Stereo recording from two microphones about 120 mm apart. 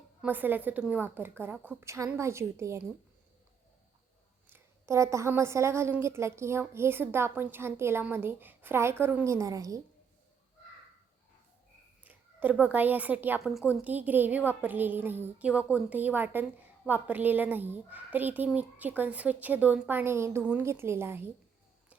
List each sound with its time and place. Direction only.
0.2 s a woman's voice: 15° right (ahead or behind)
4.4 s a woman's voice: 20° right (ahead or behind)
12.0 s a woman's voice: 15° right (ahead or behind)
13.4 s a woman's voice: centre (ahead or behind)
13.7 s a woman's voice: 15° right (ahead or behind)